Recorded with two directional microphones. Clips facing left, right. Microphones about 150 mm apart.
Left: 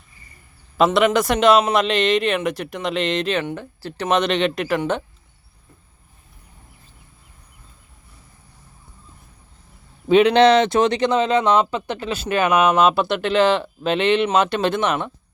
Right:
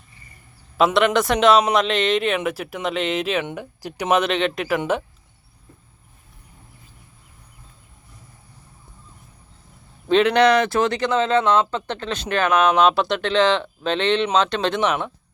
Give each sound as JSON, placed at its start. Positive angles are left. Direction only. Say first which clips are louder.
{"t": 0.8, "sound": "speech", "louder": "left 1 dB", "side_deg": 0}
{"t": 10.1, "sound": "speech", "louder": "left 3 dB", "side_deg": 10}
{"t": 10.3, "sound": "speech", "louder": "left 3 dB", "side_deg": 25}